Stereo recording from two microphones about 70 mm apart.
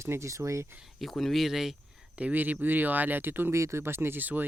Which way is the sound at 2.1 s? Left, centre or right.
Right.